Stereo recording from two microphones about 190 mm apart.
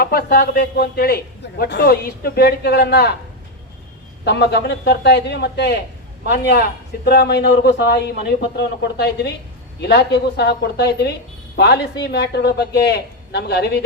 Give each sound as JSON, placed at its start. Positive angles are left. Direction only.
{"t": 0.0, "sound": "a man's voice", "side_deg": 50}
{"t": 4.2, "sound": "a man's voice", "side_deg": 60}